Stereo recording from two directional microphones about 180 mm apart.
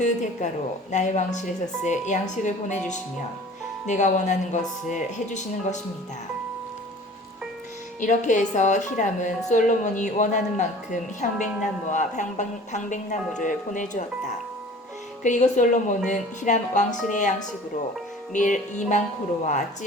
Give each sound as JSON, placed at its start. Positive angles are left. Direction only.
{"t": 0.0, "sound": "a woman's voice", "side_deg": 40}
{"t": 8.0, "sound": "a woman's voice", "side_deg": 45}
{"t": 18.3, "sound": "a woman's voice", "side_deg": 45}